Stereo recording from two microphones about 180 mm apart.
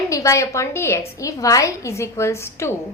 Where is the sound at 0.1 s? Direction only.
15° left (ahead or behind).